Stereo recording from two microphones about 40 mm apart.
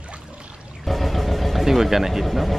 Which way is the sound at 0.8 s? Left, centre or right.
Centre.